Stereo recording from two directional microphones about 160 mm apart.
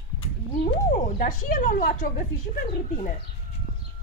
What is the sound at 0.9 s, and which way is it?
Speech, 60° left (ahead or behind).